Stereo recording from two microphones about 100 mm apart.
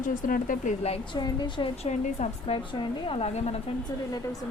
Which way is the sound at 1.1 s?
50° left (ahead or behind).